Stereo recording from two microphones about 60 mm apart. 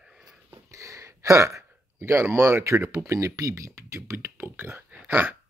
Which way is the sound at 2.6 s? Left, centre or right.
Right.